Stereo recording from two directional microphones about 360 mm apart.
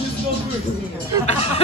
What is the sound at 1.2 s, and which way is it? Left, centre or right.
Speech, centre.